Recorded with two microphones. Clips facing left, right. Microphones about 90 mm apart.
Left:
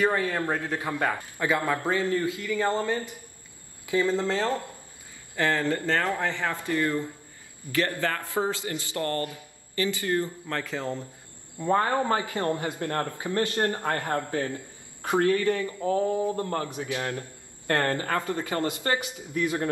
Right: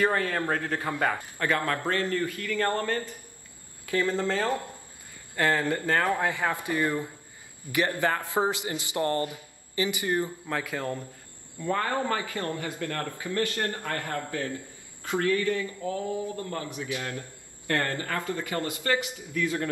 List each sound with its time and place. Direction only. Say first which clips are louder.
0.0 s speech: left 1 dB; 5° left (ahead or behind)
1.1 s speech: left 1 dB; 15° left (ahead or behind)
5.4 s speech: even; 10° right (ahead or behind)
11.5 s a man's voice: left 4 dB; 25° left (ahead or behind)
16.7 s a man's voice: left 3 dB; 25° left (ahead or behind)